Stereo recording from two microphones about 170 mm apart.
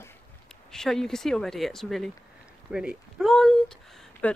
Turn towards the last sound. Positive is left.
turn(degrees=5)  # may be behind; listen again after turning